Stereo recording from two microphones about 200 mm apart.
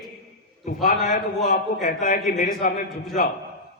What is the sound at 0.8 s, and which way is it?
A man's voice, 35° left (ahead or behind).